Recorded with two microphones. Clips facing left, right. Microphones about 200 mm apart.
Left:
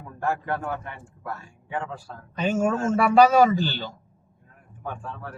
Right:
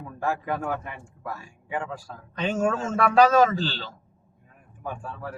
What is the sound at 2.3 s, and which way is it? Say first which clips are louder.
A man's voice: left 2 dB; 5° left (ahead or behind).